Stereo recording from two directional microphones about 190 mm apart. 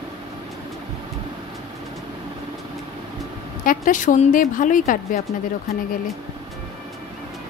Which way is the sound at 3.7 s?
45° left (ahead or behind).